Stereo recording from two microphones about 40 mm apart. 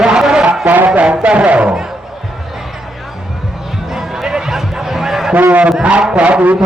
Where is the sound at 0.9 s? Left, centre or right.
Right.